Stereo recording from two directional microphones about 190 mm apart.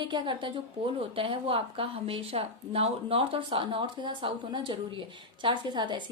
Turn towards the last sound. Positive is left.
turn(degrees=-25)  # may be behind; listen again after turning